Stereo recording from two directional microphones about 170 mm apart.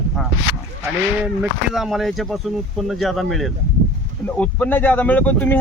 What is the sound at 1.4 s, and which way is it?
Speech, centre (ahead or behind).